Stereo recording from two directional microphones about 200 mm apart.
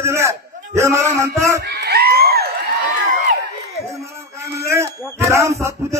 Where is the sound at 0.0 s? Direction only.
15° right (ahead or behind).